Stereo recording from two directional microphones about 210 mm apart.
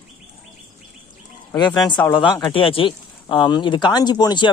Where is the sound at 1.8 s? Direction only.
5° left (ahead or behind).